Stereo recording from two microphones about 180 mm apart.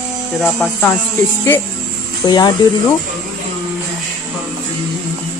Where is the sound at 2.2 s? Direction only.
20° left (ahead or behind).